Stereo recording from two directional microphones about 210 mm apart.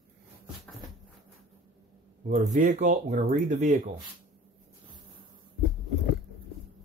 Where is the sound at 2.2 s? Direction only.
40° right (ahead or behind).